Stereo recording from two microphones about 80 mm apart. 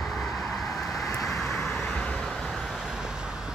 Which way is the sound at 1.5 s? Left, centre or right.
Left.